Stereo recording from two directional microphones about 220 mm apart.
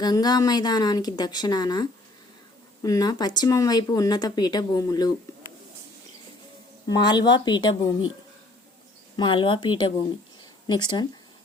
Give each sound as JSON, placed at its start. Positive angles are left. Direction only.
{"t": 0.0, "sound": "speech", "side_deg": 20}
{"t": 6.8, "sound": "speech", "side_deg": 20}
{"t": 9.1, "sound": "speech", "side_deg": 20}